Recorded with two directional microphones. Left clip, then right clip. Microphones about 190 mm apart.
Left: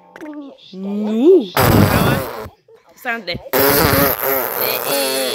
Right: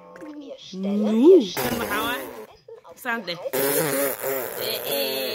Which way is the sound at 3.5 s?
40° left (ahead or behind).